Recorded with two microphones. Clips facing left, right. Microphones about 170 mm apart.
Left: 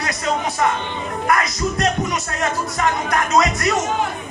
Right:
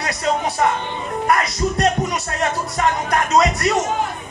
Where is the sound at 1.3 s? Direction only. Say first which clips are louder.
Right 1 dB; 30° right (ahead or behind).